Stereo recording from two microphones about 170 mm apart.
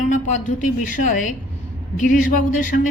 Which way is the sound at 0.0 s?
45° left (ahead or behind).